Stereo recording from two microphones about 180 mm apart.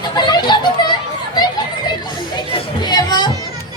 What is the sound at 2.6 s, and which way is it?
Music, 25° left (ahead or behind).